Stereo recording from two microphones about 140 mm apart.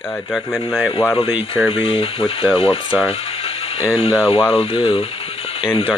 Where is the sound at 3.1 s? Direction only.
45° left (ahead or behind).